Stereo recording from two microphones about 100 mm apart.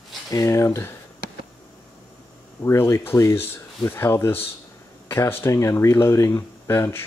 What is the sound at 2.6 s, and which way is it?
Speech, 25° left (ahead or behind).